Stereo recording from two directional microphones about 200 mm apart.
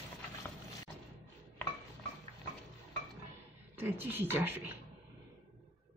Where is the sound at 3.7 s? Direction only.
10° right (ahead or behind).